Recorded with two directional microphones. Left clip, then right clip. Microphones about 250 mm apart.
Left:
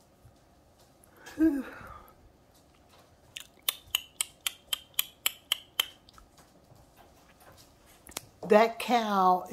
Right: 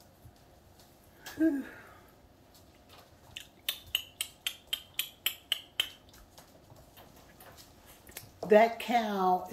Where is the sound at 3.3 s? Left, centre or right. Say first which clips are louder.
Left 3 dB; left.